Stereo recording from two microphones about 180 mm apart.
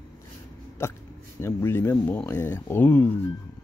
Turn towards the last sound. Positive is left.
turn(degrees=10)  # may be behind; listen again after turning